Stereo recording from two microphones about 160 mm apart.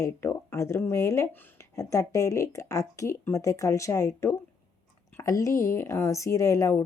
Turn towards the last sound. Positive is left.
turn(degrees=15)  # may be behind; listen again after turning